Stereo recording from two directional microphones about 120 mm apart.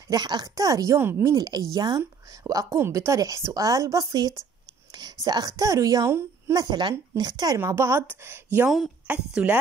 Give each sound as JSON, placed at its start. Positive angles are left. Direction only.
{"t": 0.1, "sound": "a woman's voice", "side_deg": -35}
{"t": 6.6, "sound": "a woman's voice", "side_deg": -35}
{"t": 8.6, "sound": "speech", "side_deg": 0}
{"t": 9.0, "sound": "speech", "side_deg": -15}